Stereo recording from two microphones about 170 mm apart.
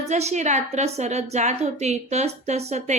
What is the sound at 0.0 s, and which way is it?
A woman's voice, 40° right (ahead or behind).